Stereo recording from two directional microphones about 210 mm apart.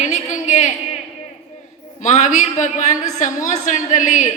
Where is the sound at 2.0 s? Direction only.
35° left (ahead or behind).